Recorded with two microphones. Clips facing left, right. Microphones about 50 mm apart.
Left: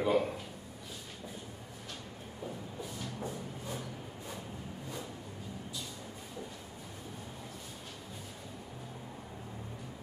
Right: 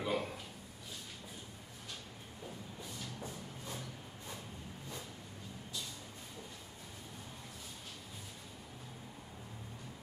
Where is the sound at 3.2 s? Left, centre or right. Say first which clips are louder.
Left 6 dB; centre.